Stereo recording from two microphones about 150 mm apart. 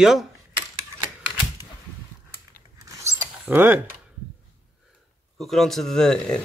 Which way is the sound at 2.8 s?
20° right (ahead or behind).